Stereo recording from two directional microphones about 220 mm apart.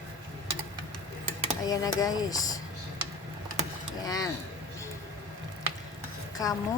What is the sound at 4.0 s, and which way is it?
Speech, 15° left (ahead or behind).